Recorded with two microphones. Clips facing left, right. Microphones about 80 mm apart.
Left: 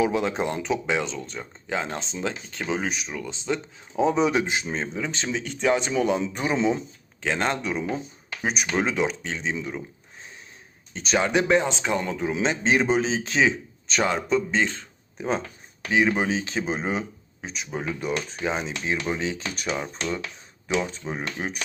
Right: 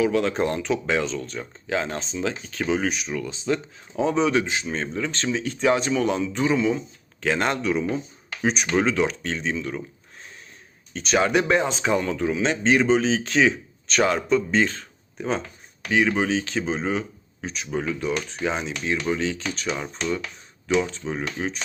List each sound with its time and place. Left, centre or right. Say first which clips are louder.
0.0 s speech: right 2 dB; centre
4.7 s speech: right 2 dB; centre
5.3 s speech: right 2 dB; centre; by 6.7 s left
7.2 s speech: right 2 dB; centre
10.9 s speech: right 2 dB; centre
11.9 s speech: right 2 dB; centre
15.9 s speech: right 1 dB; centre
17.4 s speech: right 3 dB; centre
17.7 s speech: right 3 dB; centre
18.3 s speech: right 1 dB; centre
19.0 s speech: right 3 dB; centre
19.6 s speech: right 1 dB; centre
21.4 s speech: right 3 dB; left